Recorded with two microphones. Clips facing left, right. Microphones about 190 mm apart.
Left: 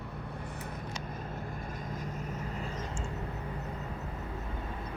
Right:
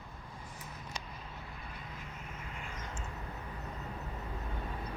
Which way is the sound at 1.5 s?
45° left (ahead or behind).